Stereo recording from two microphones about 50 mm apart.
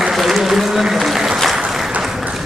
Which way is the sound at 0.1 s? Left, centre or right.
Centre.